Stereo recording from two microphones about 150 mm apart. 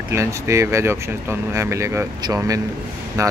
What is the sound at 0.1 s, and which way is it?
Speech, 20° right (ahead or behind).